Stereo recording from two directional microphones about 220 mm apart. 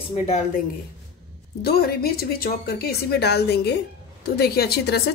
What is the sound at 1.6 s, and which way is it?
Speech, 45° left (ahead or behind).